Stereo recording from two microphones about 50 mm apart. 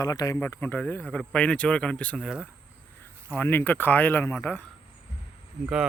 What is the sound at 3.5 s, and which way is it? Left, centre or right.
Speech, left.